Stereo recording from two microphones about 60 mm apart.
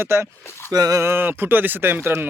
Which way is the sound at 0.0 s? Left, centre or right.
Right.